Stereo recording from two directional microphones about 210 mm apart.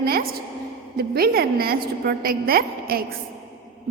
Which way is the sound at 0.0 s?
45° right (ahead or behind).